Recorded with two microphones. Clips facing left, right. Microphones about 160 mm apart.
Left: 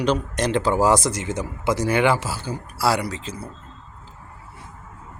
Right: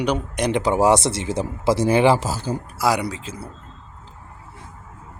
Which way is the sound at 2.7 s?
15° right (ahead or behind).